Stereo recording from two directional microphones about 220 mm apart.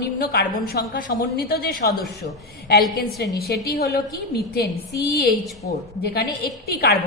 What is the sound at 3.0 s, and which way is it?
A woman's voice, 45° left (ahead or behind).